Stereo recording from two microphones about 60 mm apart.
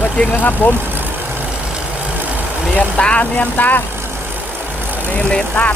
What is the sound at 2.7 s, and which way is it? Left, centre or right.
Speech, centre.